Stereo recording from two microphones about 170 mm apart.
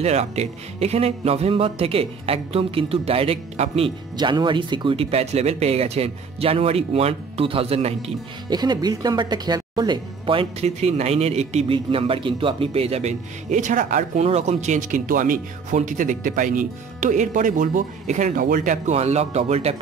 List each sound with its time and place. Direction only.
0.0 s speech: 40° right (ahead or behind)